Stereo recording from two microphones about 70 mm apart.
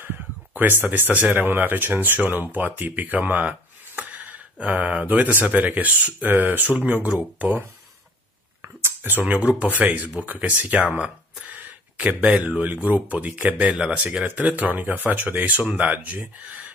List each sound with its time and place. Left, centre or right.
0.8 s speech: right
8.6 s a sound: right
9.2 s speech: right